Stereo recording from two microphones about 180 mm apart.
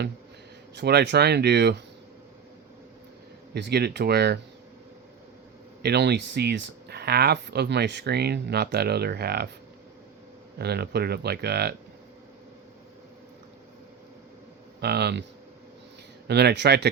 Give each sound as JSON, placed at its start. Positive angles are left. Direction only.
{"t": 0.8, "sound": "speech", "side_deg": -65}
{"t": 3.5, "sound": "speech", "side_deg": -65}
{"t": 5.8, "sound": "speech", "side_deg": -65}
{"t": 10.6, "sound": "speech", "side_deg": -65}
{"t": 14.8, "sound": "speech", "side_deg": -65}
{"t": 16.2, "sound": "speech", "side_deg": -65}